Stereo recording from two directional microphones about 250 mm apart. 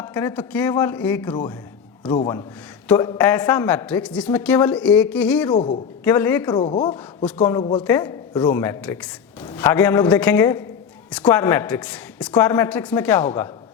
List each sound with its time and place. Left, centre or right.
0.0 s a woman's voice: centre
5.5 s a woman's voice: centre